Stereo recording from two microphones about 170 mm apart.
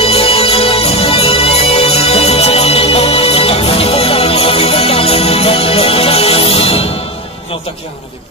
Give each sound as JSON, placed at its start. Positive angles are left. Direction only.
{"t": 0.0, "sound": "music", "side_deg": 35}